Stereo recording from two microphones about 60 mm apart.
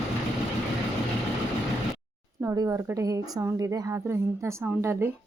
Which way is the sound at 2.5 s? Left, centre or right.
Right.